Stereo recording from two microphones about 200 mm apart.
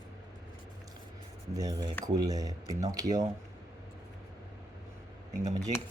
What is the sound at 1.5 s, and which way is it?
Speech, 20° right (ahead or behind).